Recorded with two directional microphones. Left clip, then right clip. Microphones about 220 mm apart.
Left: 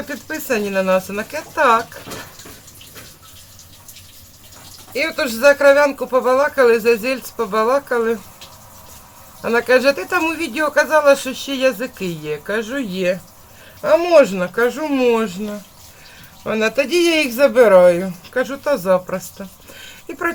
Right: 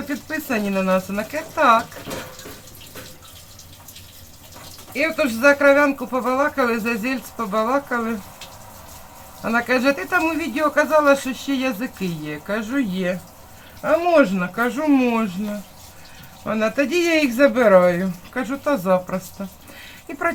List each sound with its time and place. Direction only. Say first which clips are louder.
0.3 s speech: left 4 dB; 20° left (ahead or behind)
4.9 s speech: left 1 dB; 20° left (ahead or behind)
9.4 s speech: left 5 dB; 20° left (ahead or behind)
16.5 s speech: left 3 dB; 20° left (ahead or behind)